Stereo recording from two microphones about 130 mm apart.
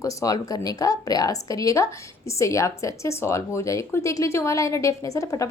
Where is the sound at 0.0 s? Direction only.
25° left (ahead or behind).